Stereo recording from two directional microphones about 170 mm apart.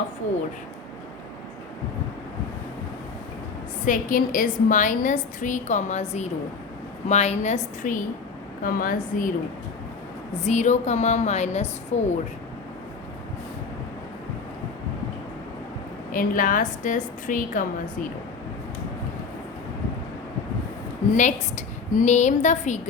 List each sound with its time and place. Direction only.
3.8 s a woman's voice: 50° left (ahead or behind)
10.4 s a woman's voice: 45° left (ahead or behind)
16.1 s a woman's voice: 50° left (ahead or behind)
21.2 s a woman's voice: 45° left (ahead or behind)